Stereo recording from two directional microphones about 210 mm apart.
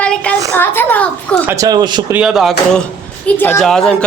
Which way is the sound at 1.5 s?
15° right (ahead or behind).